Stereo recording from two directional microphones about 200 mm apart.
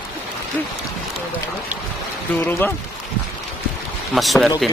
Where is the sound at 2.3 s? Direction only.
10° left (ahead or behind).